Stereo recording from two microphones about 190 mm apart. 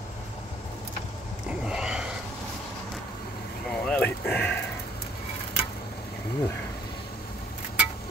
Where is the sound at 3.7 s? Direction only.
5° left (ahead or behind).